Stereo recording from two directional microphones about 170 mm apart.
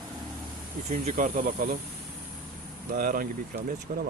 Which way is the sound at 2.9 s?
60° right (ahead or behind).